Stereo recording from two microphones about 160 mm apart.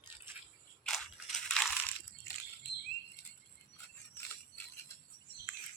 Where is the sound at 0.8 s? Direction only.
Centre (ahead or behind).